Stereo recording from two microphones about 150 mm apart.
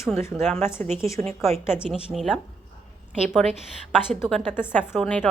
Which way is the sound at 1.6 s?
5° right (ahead or behind).